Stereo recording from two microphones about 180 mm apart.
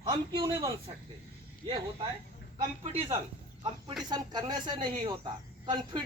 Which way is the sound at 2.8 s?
30° right (ahead or behind).